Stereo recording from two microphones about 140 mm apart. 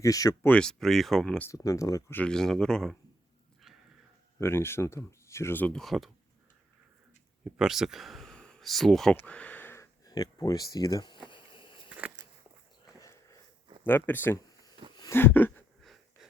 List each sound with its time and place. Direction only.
0.0 s speech: 25° left (ahead or behind)
0.4 s speech: 5° left (ahead or behind)
1.5 s speech: 25° left (ahead or behind); by 3.0 s 5° left (ahead or behind)
4.4 s speech: 15° left (ahead or behind); by 6.1 s centre (ahead or behind)
7.4 s speech: 5° right (ahead or behind)
9.1 s a sound: 10° left (ahead or behind); by 10.7 s 25° left (ahead or behind)
10.8 s speech: 25° left (ahead or behind)
11.3 s a sound: 35° left (ahead or behind)
11.9 s biting: 10° right (ahead or behind)
13.8 s speech: 15° left (ahead or behind)
14.8 s a sound: 40° right (ahead or behind)
15.1 s a sound: 15° left (ahead or behind)